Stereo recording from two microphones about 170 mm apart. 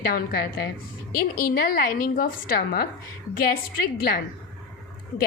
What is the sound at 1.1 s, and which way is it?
A woman's voice, 55° left (ahead or behind).